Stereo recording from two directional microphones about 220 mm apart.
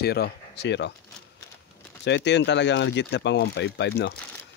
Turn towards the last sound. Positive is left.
turn(degrees=50)  # may be behind; listen again after turning